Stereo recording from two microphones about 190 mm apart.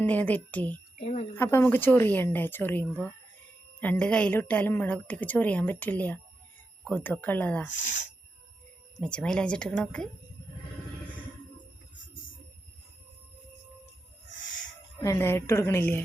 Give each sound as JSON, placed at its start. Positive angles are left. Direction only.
{"t": 0.0, "sound": "a woman's voice", "side_deg": 10}
{"t": 0.9, "sound": "a sound", "side_deg": 35}
{"t": 1.4, "sound": "a woman's voice", "side_deg": 15}
{"t": 9.0, "sound": "speech", "side_deg": 5}
{"t": 15.0, "sound": "a woman's voice", "side_deg": 15}